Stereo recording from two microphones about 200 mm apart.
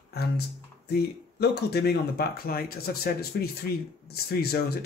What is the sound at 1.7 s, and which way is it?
Speech, 50° left (ahead or behind).